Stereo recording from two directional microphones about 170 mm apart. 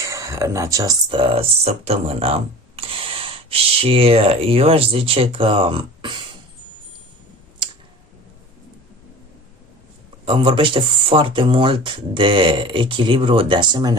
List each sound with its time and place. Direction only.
0.0 s speech: 20° right (ahead or behind)
10.2 s speech: 30° right (ahead or behind)